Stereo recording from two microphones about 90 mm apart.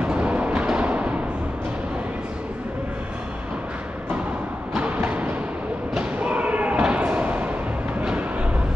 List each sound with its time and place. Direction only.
0.0 s music: 15° right (ahead or behind)
4.7 s thump: 15° right (ahead or behind)
8.0 s music: 10° right (ahead or behind)